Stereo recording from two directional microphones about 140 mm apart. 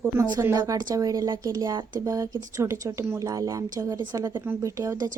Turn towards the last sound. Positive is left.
turn(degrees=-25)  # may be behind; listen again after turning